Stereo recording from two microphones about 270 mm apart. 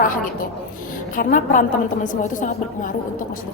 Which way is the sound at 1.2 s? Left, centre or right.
Left.